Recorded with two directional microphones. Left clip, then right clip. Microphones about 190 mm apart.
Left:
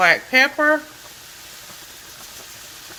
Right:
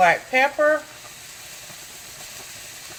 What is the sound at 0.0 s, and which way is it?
Speech, 45° left (ahead or behind).